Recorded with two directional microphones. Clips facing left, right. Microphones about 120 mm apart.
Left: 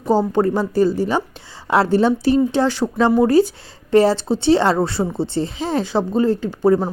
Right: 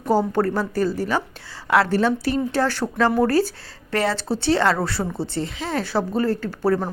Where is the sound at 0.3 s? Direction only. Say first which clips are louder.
Left 5 dB; 20° left (ahead or behind).